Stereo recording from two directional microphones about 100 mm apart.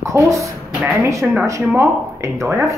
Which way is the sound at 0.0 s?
30° right (ahead or behind).